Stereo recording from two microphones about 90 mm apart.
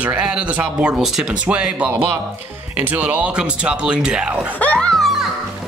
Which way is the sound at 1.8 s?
25° right (ahead or behind).